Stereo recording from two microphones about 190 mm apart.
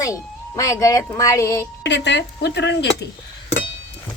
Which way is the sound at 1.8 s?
65° left (ahead or behind).